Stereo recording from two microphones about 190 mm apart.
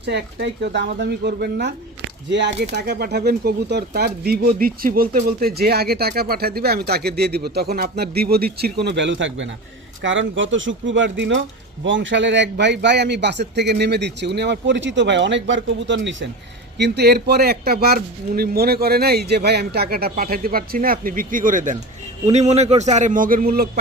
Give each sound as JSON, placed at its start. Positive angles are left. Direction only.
{"t": 0.0, "sound": "a man's voice", "side_deg": -60}